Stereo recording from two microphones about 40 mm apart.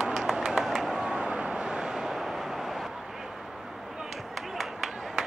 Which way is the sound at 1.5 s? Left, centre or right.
Centre.